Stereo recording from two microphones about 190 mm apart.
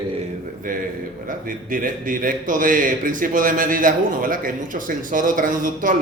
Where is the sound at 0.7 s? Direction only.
45° right (ahead or behind).